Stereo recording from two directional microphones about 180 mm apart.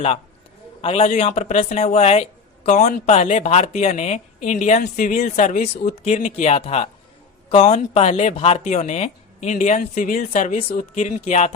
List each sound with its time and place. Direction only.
0.8 s speech: 30° left (ahead or behind)